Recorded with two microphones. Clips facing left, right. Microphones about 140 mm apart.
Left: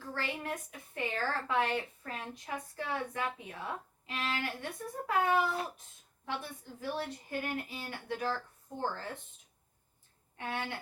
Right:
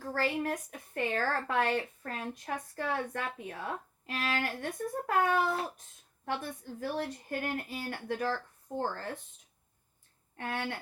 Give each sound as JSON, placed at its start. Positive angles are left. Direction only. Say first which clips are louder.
{"t": 0.0, "sound": "a woman's voice", "louder": "right 6 dB", "side_deg": -40}
{"t": 10.3, "sound": "speech", "louder": "right 2 dB", "side_deg": -45}